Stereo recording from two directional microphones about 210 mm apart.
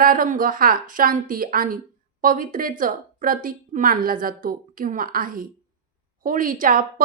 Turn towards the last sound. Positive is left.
turn(degrees=-40)  # may be behind; listen again after turning